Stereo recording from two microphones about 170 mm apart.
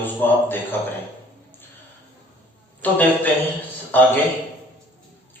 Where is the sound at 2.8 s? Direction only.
10° left (ahead or behind).